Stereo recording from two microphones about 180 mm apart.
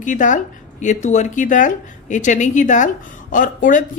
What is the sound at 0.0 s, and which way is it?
A man's voice, 45° left (ahead or behind).